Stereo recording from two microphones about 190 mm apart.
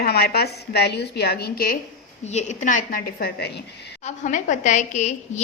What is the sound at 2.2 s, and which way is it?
A woman's voice, 35° left (ahead or behind).